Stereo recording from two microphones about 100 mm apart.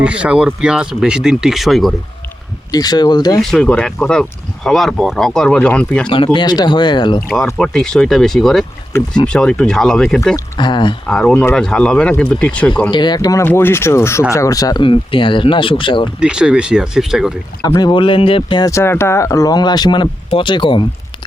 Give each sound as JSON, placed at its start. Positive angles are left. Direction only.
{"t": 0.0, "sound": "speech", "side_deg": -10}
{"t": 2.7, "sound": "speech", "side_deg": 40}
{"t": 3.4, "sound": "speech", "side_deg": 5}
{"t": 6.1, "sound": "speech", "side_deg": 50}
{"t": 7.3, "sound": "speech", "side_deg": 5}
{"t": 10.6, "sound": "speech", "side_deg": 50}
{"t": 11.0, "sound": "speech", "side_deg": 10}
{"t": 12.9, "sound": "speech", "side_deg": 50}
{"t": 13.1, "sound": "speech", "side_deg": 35}
{"t": 13.4, "sound": "speech", "side_deg": 20}
{"t": 14.8, "sound": "speech", "side_deg": 55}
{"t": 16.2, "sound": "speech", "side_deg": -10}
{"t": 17.7, "sound": "speech", "side_deg": 50}
{"t": 18.6, "sound": "speech", "side_deg": 30}